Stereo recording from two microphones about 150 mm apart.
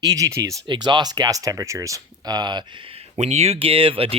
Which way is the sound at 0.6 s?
30° right (ahead or behind).